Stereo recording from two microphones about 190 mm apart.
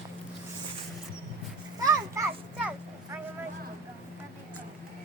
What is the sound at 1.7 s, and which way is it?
Children playing, 15° right (ahead or behind).